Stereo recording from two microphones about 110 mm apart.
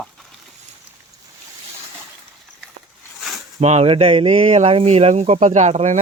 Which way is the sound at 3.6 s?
80° right.